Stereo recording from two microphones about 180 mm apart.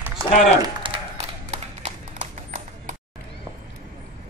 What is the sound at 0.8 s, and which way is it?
Clip-clop, 30° right (ahead or behind).